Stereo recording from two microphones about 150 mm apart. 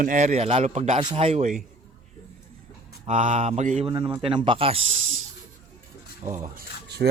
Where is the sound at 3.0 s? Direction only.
50° right (ahead or behind).